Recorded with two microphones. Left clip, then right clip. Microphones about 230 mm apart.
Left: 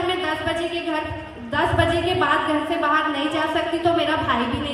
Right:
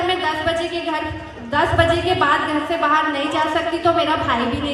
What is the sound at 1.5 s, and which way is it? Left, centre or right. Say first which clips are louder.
Speech: right 4 dB; right.